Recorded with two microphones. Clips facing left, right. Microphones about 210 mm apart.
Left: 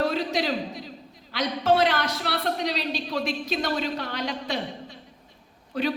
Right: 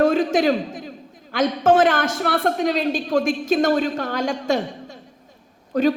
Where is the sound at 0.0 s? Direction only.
50° right (ahead or behind).